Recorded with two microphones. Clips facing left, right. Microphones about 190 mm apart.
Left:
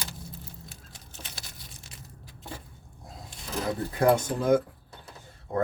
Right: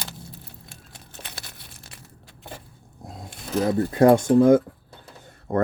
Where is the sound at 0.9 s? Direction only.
60° right (ahead or behind).